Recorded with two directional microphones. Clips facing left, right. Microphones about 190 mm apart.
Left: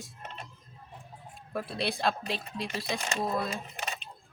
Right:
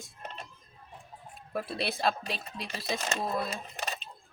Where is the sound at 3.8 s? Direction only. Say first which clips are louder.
Right 1 dB; 35° right (ahead or behind).